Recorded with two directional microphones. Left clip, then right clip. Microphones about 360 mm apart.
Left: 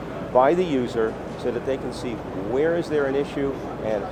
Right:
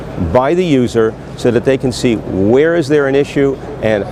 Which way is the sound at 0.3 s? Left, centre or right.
Right.